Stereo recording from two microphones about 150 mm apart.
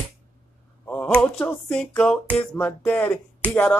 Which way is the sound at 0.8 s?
10° left (ahead or behind).